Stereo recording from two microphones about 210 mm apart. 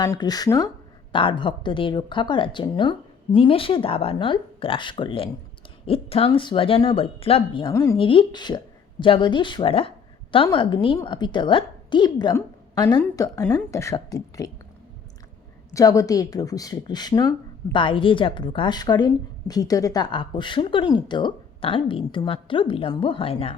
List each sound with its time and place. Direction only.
0.0 s a woman's voice: 20° left (ahead or behind)
15.7 s speech: 15° left (ahead or behind)